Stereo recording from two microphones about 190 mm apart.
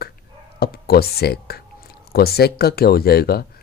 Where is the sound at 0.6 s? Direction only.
55° left (ahead or behind).